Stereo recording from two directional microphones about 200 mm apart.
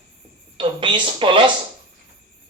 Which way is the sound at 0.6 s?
25° right (ahead or behind).